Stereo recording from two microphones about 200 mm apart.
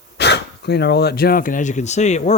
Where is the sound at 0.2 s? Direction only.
55° left (ahead or behind).